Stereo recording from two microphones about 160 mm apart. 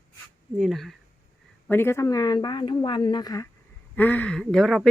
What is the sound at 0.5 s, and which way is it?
Speech, centre (ahead or behind).